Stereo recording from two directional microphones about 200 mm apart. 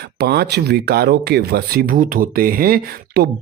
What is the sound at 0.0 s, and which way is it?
Speech, 55° right (ahead or behind).